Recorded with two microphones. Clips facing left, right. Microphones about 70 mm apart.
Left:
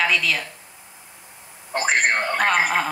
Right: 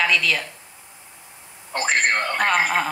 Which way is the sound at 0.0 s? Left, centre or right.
Centre.